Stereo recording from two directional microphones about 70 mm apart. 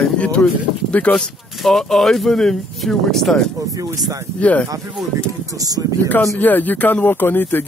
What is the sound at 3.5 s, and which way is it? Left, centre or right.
Speech, right.